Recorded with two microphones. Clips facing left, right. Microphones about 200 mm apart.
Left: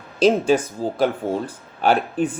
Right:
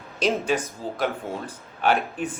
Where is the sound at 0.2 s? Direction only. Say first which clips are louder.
Left 7 dB; 30° left (ahead or behind).